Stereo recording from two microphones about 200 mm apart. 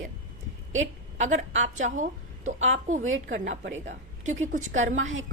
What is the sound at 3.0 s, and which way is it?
Speech, 80° right.